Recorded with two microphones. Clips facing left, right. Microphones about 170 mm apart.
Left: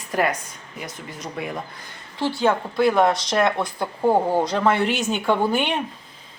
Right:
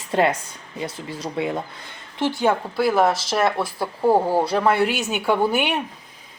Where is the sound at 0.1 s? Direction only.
25° right (ahead or behind); by 5.8 s 10° right (ahead or behind).